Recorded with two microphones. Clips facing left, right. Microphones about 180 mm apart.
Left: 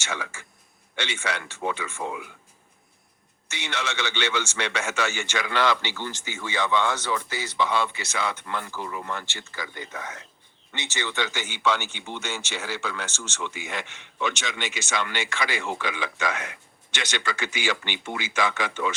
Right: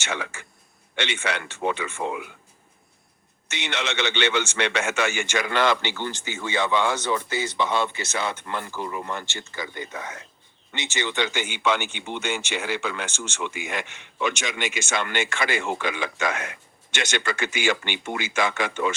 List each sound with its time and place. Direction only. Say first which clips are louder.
0.0 s speech: right 3 dB; 60° right (ahead or behind)
3.6 s speech: right 3 dB; 60° right (ahead or behind)
5.2 s speech: right 1 dB; 50° right (ahead or behind)
6.1 s speech: right 3 dB; 25° right (ahead or behind)
14.7 s speech: right 2 dB; 50° right (ahead or behind)